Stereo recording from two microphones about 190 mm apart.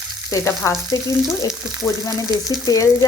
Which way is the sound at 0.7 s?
Centre (ahead or behind).